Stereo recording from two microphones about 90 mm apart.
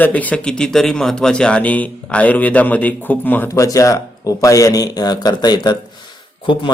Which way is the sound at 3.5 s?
35° left (ahead or behind).